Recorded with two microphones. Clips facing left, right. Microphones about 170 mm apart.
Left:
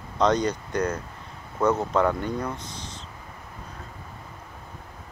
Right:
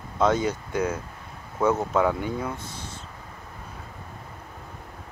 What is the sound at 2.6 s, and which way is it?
Speech, 50° right (ahead or behind).